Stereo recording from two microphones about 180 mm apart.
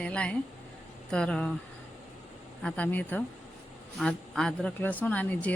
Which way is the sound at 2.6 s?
5° left (ahead or behind).